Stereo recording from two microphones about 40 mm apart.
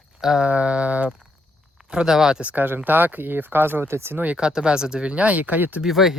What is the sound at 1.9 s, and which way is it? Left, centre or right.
Speech, right.